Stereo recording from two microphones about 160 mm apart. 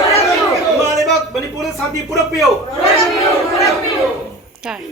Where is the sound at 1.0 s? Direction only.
Centre (ahead or behind).